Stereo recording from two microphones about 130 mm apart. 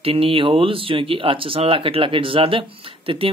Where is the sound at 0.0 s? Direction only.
45° right (ahead or behind).